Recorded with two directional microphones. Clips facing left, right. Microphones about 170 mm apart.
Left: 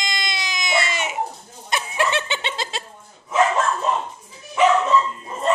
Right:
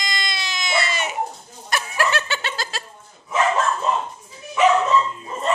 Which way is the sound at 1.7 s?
20° left (ahead or behind).